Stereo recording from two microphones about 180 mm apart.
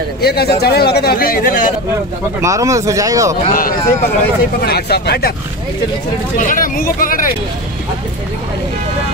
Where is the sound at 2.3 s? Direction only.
15° right (ahead or behind).